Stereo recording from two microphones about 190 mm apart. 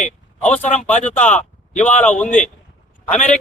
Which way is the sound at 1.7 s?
40° left (ahead or behind).